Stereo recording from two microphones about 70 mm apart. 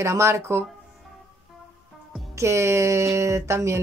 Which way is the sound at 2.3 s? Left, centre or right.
Right.